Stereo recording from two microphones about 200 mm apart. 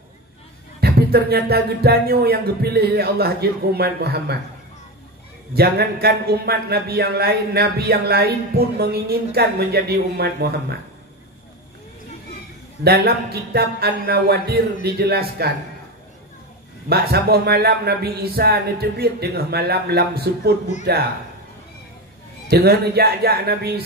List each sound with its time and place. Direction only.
0.7 s a man's voice: 50° right (ahead or behind)
5.5 s a man's voice: 50° right (ahead or behind)
12.8 s a man's voice: 50° right (ahead or behind)
16.9 s a man's voice: 50° right (ahead or behind)
22.5 s a man's voice: 50° right (ahead or behind)